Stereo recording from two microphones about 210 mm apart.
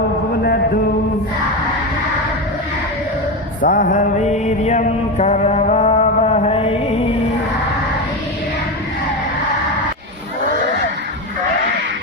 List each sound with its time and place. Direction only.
3.6 s mantra: 40° left (ahead or behind)